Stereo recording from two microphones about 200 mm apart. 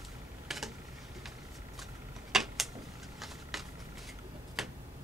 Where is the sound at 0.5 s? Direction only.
Centre (ahead or behind).